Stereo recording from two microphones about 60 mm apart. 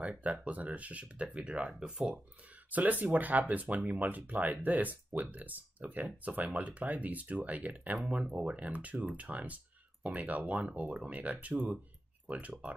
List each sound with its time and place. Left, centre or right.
0.0 s speech: right
2.7 s speech: right